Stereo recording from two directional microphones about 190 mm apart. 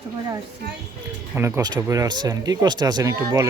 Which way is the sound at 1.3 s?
15° right (ahead or behind).